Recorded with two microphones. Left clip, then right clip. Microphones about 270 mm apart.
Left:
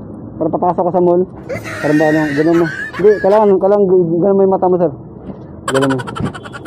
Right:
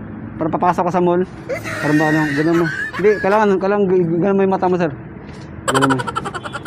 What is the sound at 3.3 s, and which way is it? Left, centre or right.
A man's voice, right.